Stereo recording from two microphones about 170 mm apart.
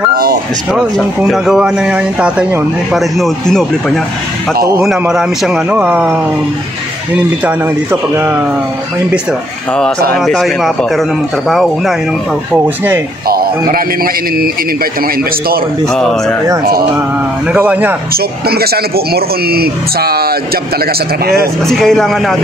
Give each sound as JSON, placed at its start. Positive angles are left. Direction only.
{"t": 0.1, "sound": "speech", "side_deg": -60}
{"t": 0.7, "sound": "speech", "side_deg": -5}
{"t": 4.8, "sound": "speech", "side_deg": -5}
{"t": 7.4, "sound": "speech", "side_deg": -10}
{"t": 10.1, "sound": "speech", "side_deg": 0}
{"t": 12.5, "sound": "speech", "side_deg": -10}
{"t": 13.3, "sound": "speech", "side_deg": -60}
{"t": 15.9, "sound": "speech", "side_deg": 5}
{"t": 17.5, "sound": "speech", "side_deg": -10}
{"t": 18.1, "sound": "speech", "side_deg": -65}
{"t": 21.6, "sound": "speech", "side_deg": 0}